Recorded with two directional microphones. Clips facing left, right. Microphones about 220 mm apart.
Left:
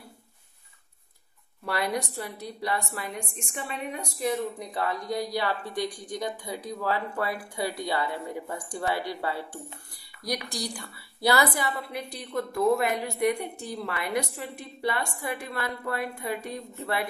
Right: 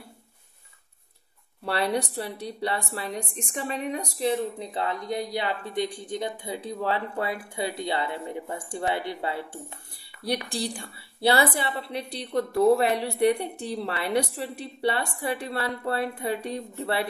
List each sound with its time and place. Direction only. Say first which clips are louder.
1.7 s a woman's voice: right 3 dB; 30° right (ahead or behind)